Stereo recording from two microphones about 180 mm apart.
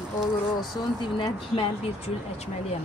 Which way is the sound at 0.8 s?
20° left (ahead or behind).